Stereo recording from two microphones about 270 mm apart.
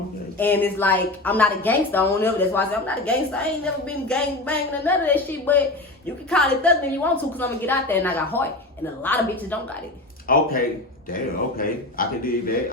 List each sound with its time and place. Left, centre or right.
0.3 s a woman's voice: centre
10.3 s a man's voice: left